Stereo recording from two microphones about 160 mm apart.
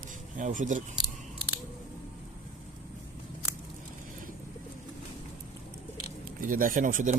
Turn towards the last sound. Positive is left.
turn(degrees=-55)  # may be behind; listen again after turning